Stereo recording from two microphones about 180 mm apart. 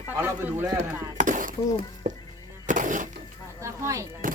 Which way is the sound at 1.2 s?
45° right (ahead or behind).